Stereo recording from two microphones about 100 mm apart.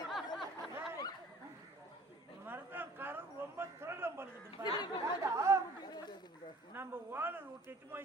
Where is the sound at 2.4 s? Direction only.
20° right (ahead or behind).